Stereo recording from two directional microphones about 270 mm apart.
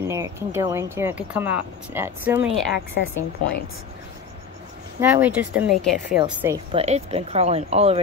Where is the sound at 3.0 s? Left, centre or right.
Left.